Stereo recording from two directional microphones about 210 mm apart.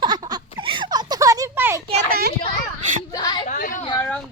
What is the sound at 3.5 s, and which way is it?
Speech, 40° left (ahead or behind).